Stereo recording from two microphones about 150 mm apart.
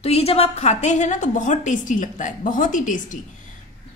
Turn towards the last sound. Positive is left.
turn(degrees=60)  # may be behind; listen again after turning